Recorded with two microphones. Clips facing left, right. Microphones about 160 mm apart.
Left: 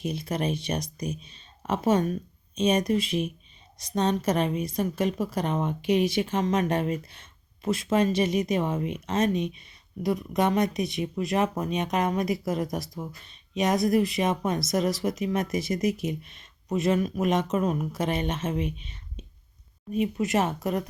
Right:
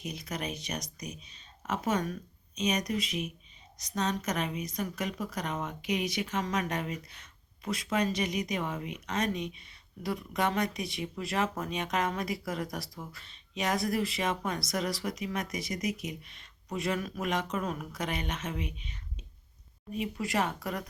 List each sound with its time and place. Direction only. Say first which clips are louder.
0.0 s a woman's voice: left 8 dB; 30° left (ahead or behind)
20.0 s a woman's voice: left 6 dB; 20° left (ahead or behind)